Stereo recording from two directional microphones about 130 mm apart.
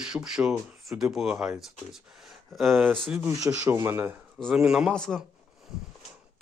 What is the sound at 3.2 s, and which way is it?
Speech, 20° right (ahead or behind).